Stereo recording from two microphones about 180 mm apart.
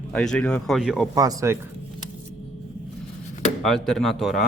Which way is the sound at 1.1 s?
20° right (ahead or behind).